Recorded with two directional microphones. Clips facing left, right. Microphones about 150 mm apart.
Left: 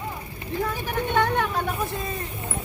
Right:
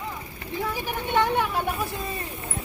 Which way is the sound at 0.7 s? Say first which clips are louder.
Right 1 dB; 10° right (ahead or behind).